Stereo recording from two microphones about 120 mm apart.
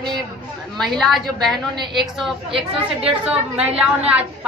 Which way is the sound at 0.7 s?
5° left (ahead or behind).